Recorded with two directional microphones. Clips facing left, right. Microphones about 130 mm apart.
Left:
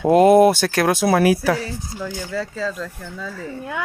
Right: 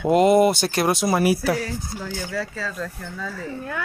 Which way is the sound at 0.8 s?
75° left (ahead or behind).